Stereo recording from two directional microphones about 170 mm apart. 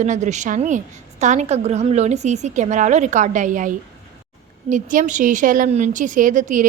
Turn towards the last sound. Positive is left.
turn(degrees=-50)  # may be behind; listen again after turning